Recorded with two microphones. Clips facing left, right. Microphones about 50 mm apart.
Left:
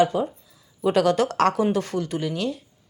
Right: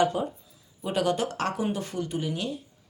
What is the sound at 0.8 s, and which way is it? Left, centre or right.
Speech, left.